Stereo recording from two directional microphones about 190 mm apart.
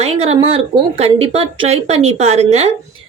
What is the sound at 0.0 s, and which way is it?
Speech, 35° right (ahead or behind).